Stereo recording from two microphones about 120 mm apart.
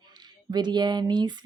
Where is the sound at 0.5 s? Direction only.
40° right (ahead or behind).